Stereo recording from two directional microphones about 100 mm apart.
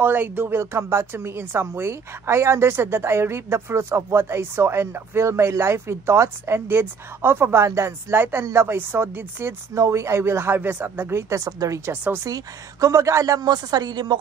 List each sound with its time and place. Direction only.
0.0 s a woman's voice: 20° right (ahead or behind); by 11.9 s 35° right (ahead or behind)
11.9 s speech: 15° right (ahead or behind)
12.2 s a woman's voice: 40° right (ahead or behind)